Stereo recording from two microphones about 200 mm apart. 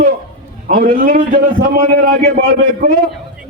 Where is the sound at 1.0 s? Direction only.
40° right (ahead or behind).